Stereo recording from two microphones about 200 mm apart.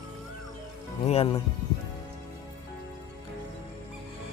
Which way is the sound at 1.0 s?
30° left (ahead or behind).